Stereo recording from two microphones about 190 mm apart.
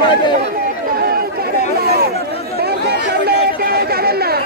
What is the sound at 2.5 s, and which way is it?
Chatter, 55° right (ahead or behind).